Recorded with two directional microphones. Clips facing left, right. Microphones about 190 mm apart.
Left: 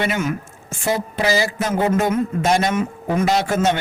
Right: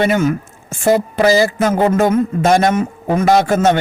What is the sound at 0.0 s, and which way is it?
A man's voice, 45° right (ahead or behind).